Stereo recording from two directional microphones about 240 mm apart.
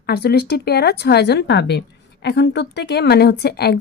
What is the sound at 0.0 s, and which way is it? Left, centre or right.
A woman's voice, left.